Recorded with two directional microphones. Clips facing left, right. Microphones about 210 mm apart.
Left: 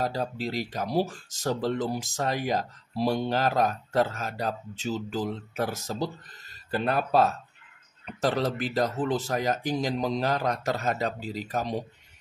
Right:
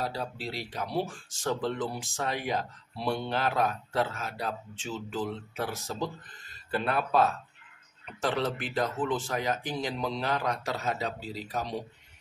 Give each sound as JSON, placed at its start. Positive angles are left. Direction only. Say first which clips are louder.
{"t": 0.0, "sound": "speech", "louder": "left 5 dB", "side_deg": 45}